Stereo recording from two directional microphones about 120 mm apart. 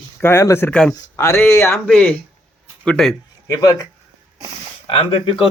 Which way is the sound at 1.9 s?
10° left (ahead or behind).